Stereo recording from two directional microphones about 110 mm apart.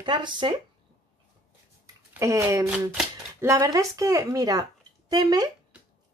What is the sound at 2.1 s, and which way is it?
Speech, 25° right (ahead or behind).